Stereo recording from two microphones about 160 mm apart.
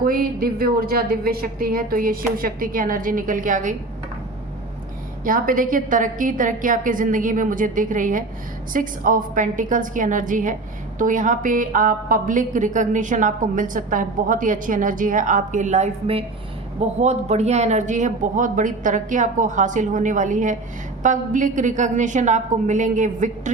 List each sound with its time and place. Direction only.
0.0 s a woman's voice: 65° right (ahead or behind)
5.2 s a woman's voice: 60° right (ahead or behind)